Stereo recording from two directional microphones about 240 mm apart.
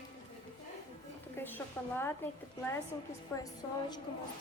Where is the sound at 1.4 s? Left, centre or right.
Centre.